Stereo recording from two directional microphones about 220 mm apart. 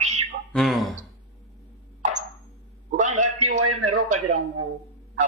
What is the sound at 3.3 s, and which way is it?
Speech, 70° right (ahead or behind).